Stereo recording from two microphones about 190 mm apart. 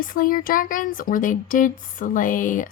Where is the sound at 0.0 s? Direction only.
45° left (ahead or behind).